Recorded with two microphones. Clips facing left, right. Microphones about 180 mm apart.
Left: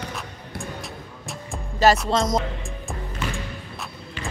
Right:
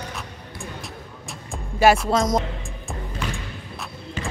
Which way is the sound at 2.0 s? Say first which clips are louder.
Right 1 dB; 5° right (ahead or behind).